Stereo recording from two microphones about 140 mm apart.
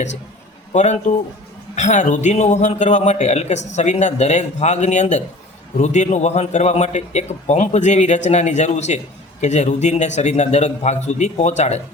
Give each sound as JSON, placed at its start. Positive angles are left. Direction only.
{"t": 0.7, "sound": "a man's voice", "side_deg": 55}